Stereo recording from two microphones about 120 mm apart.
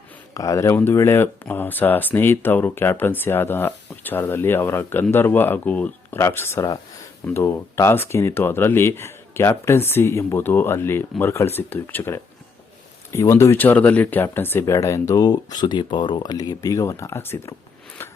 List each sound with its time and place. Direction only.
0.3 s speech: 30° left (ahead or behind)